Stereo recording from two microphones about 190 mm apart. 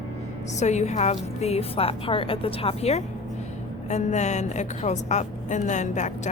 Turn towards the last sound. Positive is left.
turn(degrees=40)  # may be behind; listen again after turning